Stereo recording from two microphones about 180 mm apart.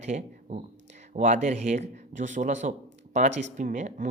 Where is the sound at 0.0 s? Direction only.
40° right (ahead or behind).